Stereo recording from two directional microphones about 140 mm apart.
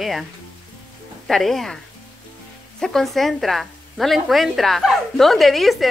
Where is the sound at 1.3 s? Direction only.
Centre (ahead or behind).